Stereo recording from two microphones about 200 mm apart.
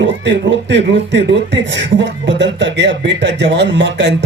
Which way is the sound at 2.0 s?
60° right (ahead or behind).